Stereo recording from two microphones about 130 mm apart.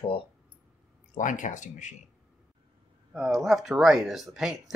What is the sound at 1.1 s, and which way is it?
Speech, 75° left (ahead or behind).